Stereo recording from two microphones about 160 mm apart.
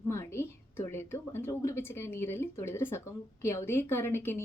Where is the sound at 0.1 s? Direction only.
15° left (ahead or behind).